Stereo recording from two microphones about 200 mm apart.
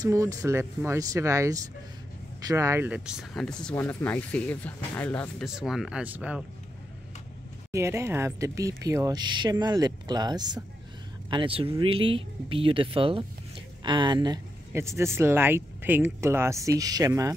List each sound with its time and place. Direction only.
0.0 s speech: 15° right (ahead or behind)
7.7 s speech: 15° right (ahead or behind)